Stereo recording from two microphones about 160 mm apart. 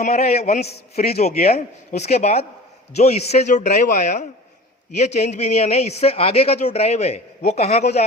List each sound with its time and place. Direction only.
0.0 s a man's voice: 45° left (ahead or behind)